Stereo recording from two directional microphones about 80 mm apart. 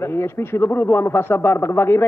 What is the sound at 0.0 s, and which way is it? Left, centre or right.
Speech, left.